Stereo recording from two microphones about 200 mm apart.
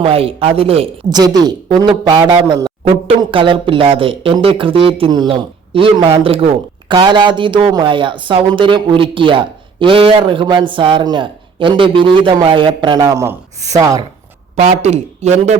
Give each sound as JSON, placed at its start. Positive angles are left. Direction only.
{"t": 0.0, "sound": "speech", "side_deg": -30}
{"t": 14.5, "sound": "a man's voice", "side_deg": -35}